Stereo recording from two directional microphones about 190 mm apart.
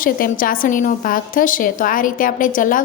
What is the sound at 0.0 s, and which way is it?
A woman's voice, 50° left (ahead or behind).